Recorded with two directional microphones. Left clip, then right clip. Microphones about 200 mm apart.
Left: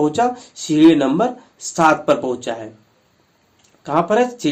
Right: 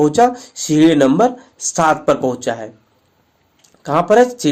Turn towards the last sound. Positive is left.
turn(degrees=-40)  # may be behind; listen again after turning